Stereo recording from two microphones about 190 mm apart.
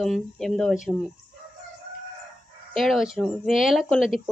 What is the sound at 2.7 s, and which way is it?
Speech, centre (ahead or behind).